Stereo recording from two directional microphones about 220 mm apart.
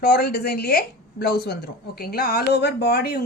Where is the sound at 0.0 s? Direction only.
45° left (ahead or behind).